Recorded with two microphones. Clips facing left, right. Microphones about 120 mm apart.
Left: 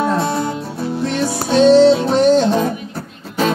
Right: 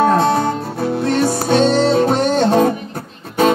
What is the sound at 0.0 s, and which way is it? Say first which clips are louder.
Music: right 4 dB; 55° right (ahead or behind).